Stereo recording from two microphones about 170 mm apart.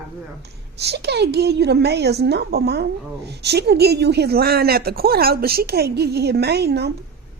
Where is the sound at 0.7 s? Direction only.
75° right (ahead or behind).